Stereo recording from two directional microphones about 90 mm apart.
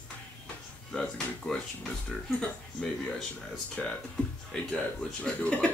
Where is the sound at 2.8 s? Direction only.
10° left (ahead or behind).